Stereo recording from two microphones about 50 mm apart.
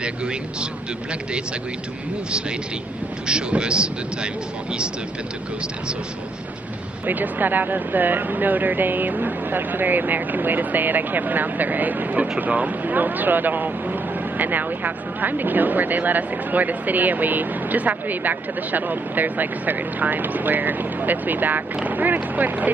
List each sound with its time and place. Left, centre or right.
0.0 s speech: right
3.3 s speech: centre
7.1 s speech: right